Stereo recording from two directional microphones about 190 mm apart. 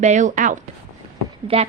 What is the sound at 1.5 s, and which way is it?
Speech, 30° right (ahead or behind).